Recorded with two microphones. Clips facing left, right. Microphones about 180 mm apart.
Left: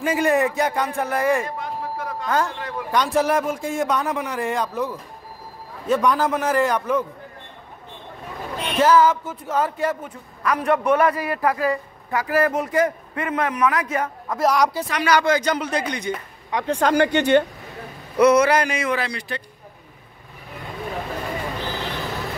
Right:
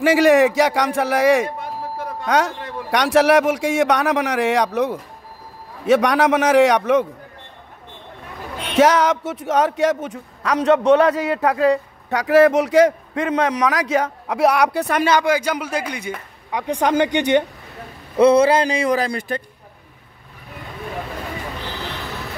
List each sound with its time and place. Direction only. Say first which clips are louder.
0.0 s speech: right 6 dB; 80° right
8.7 s speech: right 1 dB; 80° right; by 15.0 s 65° right (ahead or behind)
15.0 s a man's voice: left 2 dB; 15° right (ahead or behind)
18.1 s a man's voice: right 2 dB; 30° right (ahead or behind); by 19.4 s 45° right (ahead or behind)